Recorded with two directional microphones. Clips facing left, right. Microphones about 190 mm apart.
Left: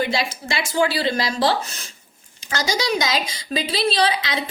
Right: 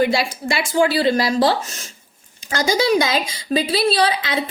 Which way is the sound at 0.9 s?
45° right (ahead or behind).